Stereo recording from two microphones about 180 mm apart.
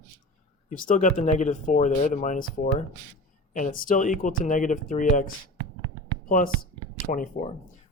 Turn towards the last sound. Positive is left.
turn(degrees=45)  # may be behind; listen again after turning